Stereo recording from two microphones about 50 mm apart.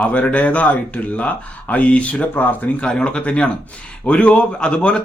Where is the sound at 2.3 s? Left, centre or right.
Left.